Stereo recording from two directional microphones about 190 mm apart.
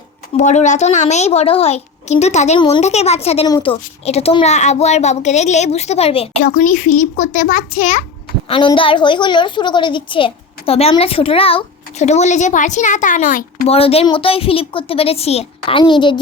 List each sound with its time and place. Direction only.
0.3 s speech: 40° left (ahead or behind)
2.6 s a woman's voice: 25° left (ahead or behind)
2.8 s speech: 35° left (ahead or behind)
6.4 s speech: 40° left (ahead or behind)
8.4 s a woman's voice: 25° left (ahead or behind); by 13.7 s 45° left (ahead or behind)
13.7 s a woman's voice: 30° left (ahead or behind)